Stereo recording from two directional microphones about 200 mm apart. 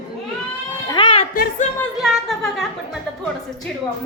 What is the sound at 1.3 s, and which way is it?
Speech, 45° left (ahead or behind).